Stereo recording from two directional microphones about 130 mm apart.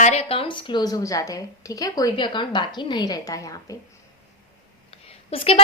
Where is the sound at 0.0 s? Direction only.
55° left (ahead or behind); by 3.8 s 25° left (ahead or behind).